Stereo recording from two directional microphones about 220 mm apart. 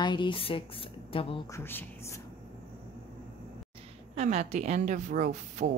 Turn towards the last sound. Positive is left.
turn(degrees=-35)  # may be behind; listen again after turning